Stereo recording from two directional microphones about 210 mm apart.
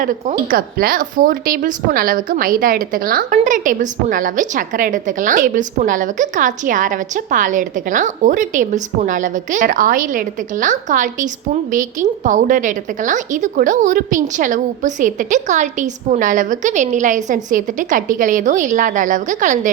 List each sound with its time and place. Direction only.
0.0 s a woman's voice: 40° right (ahead or behind)